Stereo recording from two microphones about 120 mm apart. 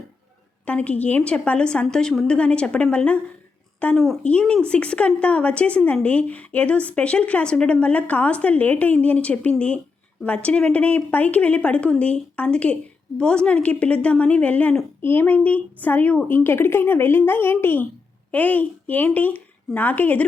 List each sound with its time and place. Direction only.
0.6 s a woman's voice: 10° left (ahead or behind)